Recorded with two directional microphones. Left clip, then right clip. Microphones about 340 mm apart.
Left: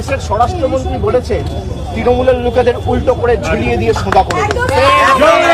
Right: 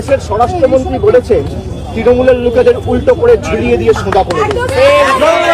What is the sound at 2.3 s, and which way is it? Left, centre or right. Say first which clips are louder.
Speech: right 3 dB; centre.